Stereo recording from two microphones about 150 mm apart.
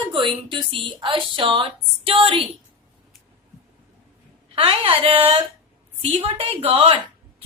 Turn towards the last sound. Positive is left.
turn(degrees=-40)  # may be behind; listen again after turning